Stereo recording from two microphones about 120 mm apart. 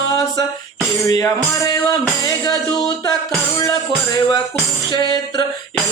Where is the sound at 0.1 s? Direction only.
30° left (ahead or behind).